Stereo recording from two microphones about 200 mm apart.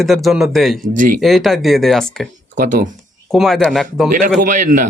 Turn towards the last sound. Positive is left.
turn(degrees=-40)  # may be behind; listen again after turning